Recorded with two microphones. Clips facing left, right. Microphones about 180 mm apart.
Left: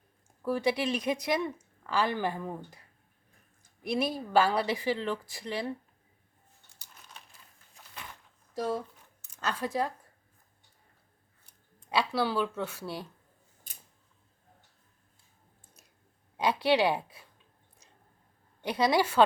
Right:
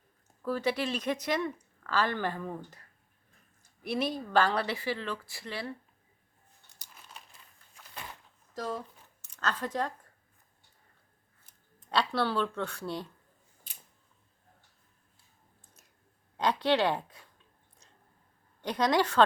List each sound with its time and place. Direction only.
0.4 s a woman's voice: 15° left (ahead or behind)
3.8 s speech: 10° left (ahead or behind)
6.7 s crumpling: 10° right (ahead or behind)
8.5 s speech: 10° left (ahead or behind)
11.9 s speech: 5° left (ahead or behind)
16.4 s speech: 10° left (ahead or behind)
18.6 s speech: 10° left (ahead or behind)